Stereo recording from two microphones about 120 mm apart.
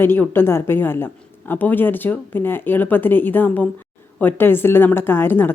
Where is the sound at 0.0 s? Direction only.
20° left (ahead or behind).